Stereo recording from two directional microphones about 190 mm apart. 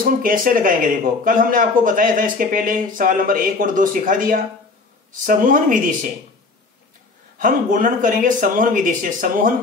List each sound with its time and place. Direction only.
0.0 s speech: 45° right (ahead or behind)
7.3 s speech: 45° right (ahead or behind)